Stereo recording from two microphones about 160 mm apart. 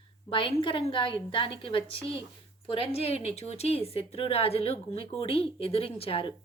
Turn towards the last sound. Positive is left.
turn(degrees=35)  # may be behind; listen again after turning